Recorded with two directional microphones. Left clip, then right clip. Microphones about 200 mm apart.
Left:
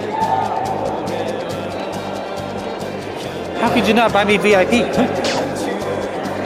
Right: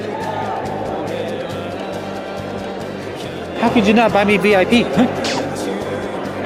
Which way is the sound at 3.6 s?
40° right (ahead or behind).